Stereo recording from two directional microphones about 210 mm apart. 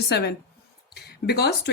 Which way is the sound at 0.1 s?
50° left (ahead or behind).